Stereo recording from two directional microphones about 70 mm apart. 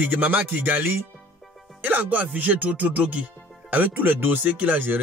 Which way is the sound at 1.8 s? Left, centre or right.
Right.